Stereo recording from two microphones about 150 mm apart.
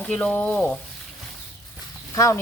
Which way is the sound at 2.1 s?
20° left (ahead or behind).